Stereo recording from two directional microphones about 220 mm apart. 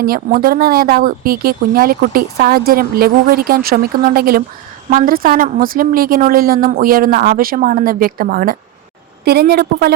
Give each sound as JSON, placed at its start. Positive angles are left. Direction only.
{"t": 0.0, "sound": "a woman's voice", "side_deg": -40}